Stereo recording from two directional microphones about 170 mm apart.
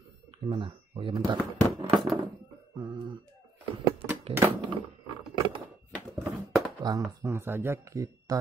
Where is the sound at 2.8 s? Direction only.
25° right (ahead or behind).